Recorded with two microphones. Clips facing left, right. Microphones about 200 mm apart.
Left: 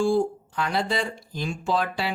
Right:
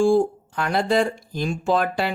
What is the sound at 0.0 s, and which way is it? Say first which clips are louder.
Speech: right 4 dB; 50° right (ahead or behind).